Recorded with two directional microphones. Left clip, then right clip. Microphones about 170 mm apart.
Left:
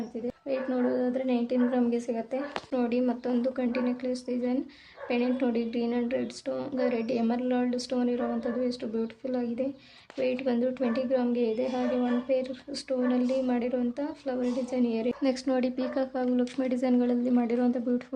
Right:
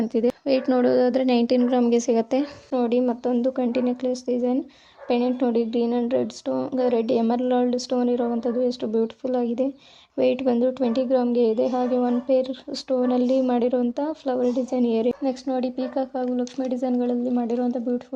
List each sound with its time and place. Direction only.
0.4 s a woman's voice: 50° right (ahead or behind)
2.7 s speech: 25° right (ahead or behind)
15.2 s speech: 10° right (ahead or behind)